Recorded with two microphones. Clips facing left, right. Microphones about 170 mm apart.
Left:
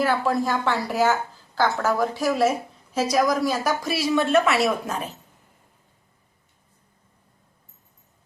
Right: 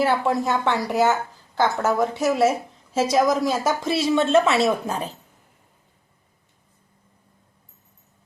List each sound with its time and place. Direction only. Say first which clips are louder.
0.0 s a woman's voice: right 1 dB; 25° right (ahead or behind)